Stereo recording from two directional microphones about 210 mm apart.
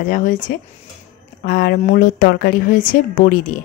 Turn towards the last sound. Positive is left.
turn(degrees=40)  # may be behind; listen again after turning